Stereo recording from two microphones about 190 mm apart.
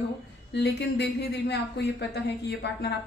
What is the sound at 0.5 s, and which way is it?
A woman's voice, 65° left (ahead or behind).